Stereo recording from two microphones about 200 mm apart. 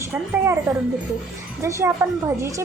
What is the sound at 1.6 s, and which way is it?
Speech, 15° right (ahead or behind).